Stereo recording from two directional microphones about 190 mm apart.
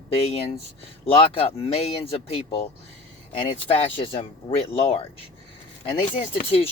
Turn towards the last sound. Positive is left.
turn(degrees=30)  # may be behind; listen again after turning